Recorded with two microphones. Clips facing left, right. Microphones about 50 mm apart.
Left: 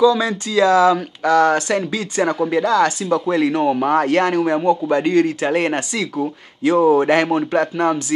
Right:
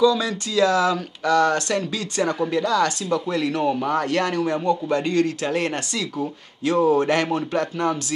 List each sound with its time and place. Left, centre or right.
0.0 s speech: centre
3.8 s speech: left
4.2 s speech: centre